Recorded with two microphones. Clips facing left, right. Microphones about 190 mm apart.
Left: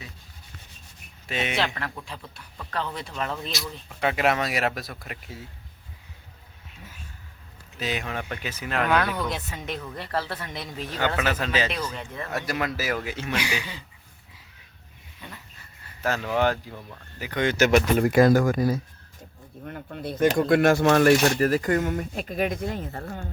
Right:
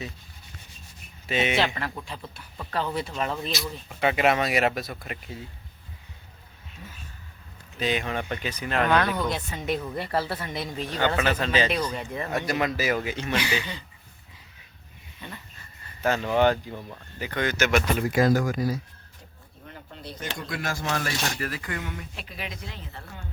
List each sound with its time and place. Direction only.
1.3 s speech: centre (ahead or behind)
7.8 s speech: 5° left (ahead or behind)
11.9 s speech: 15° right (ahead or behind)
12.5 s speech: centre (ahead or behind)
15.2 s dog: centre (ahead or behind)
16.0 s speech: centre (ahead or behind)
17.4 s speech: 30° left (ahead or behind)
18.0 s speech: 55° left (ahead or behind)
21.3 s speech: 40° left (ahead or behind)